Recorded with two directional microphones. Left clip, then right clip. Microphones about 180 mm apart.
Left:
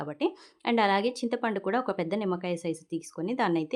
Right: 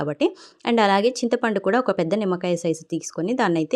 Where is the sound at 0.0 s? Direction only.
30° right (ahead or behind).